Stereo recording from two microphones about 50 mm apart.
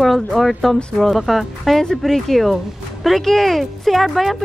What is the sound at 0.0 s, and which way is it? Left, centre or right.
Speech, centre.